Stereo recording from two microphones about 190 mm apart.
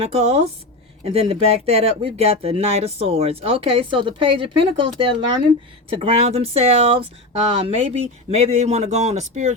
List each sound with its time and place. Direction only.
0.0 s speech: 35° right (ahead or behind)